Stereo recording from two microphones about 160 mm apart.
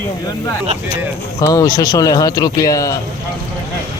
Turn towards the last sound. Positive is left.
turn(degrees=20)  # may be behind; listen again after turning